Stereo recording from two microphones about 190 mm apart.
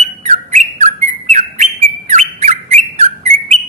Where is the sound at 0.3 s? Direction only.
40° right (ahead or behind).